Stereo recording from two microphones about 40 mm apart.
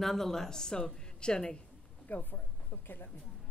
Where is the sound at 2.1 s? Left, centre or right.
Left.